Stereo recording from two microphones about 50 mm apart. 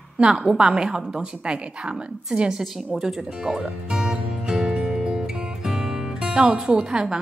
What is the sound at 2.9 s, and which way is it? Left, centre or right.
Music, centre.